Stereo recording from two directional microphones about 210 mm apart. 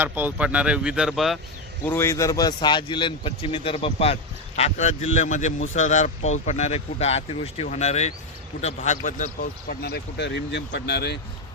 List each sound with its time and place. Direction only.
0.0 s speech: 10° right (ahead or behind)
1.8 s a man's voice: 10° left (ahead or behind); by 11.2 s 50° left (ahead or behind)